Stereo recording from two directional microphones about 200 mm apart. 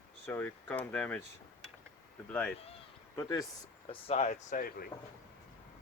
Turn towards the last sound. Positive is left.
turn(degrees=45)  # may be behind; listen again after turning